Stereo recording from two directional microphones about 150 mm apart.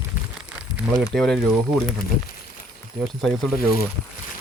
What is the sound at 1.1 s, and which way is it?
Speech, 5° left (ahead or behind).